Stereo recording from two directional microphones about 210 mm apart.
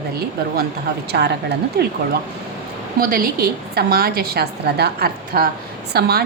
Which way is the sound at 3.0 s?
40° right (ahead or behind).